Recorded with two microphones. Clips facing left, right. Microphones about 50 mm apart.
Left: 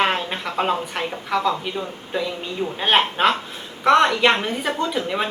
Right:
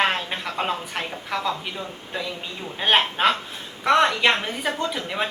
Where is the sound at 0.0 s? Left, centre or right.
Centre.